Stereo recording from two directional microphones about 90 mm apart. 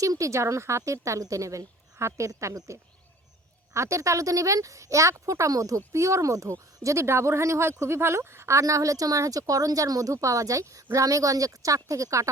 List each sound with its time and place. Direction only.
0.0 s speech: 35° right (ahead or behind)
3.8 s speech: 35° right (ahead or behind)